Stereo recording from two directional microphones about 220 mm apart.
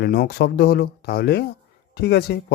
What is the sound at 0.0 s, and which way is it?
Speech, 45° left (ahead or behind).